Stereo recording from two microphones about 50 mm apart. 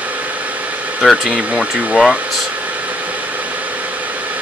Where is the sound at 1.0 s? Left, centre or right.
Centre.